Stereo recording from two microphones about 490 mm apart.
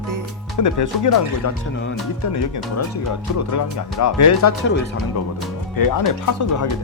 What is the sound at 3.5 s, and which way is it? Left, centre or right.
Speech, left.